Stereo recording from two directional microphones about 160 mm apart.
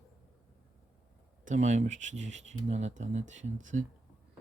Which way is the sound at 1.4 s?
50° right (ahead or behind).